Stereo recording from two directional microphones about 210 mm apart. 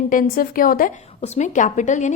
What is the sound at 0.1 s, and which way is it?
A woman's voice, 40° left (ahead or behind).